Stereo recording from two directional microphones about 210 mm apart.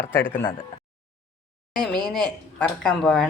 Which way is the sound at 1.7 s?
Centre (ahead or behind).